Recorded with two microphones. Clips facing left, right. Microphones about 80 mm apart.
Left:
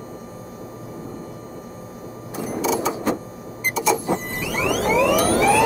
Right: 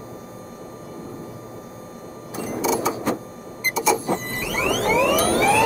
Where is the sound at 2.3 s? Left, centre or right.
Centre.